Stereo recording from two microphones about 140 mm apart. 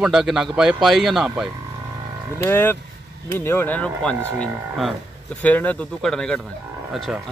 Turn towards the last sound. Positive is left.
turn(degrees=0)  # may be behind; listen again after turning